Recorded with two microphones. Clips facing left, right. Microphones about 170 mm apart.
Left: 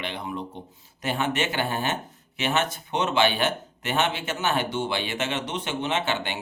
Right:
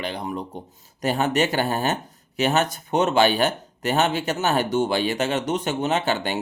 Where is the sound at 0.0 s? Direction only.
40° right (ahead or behind).